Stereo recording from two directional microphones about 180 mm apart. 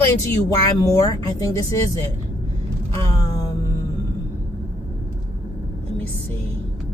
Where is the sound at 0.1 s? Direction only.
15° left (ahead or behind).